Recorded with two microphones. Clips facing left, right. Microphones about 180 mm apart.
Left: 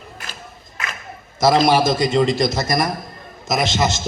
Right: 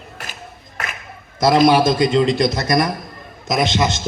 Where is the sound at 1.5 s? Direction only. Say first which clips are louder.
Right 3 dB; 55° right (ahead or behind).